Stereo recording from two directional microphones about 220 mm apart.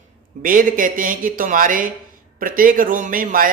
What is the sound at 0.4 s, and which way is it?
Speech, 40° right (ahead or behind).